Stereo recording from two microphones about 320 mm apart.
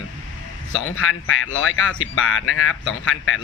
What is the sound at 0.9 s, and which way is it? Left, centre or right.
Speech, left.